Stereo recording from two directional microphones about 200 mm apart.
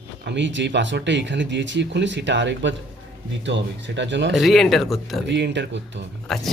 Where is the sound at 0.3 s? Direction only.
65° right (ahead or behind).